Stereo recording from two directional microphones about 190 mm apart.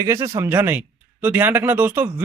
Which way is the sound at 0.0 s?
15° right (ahead or behind).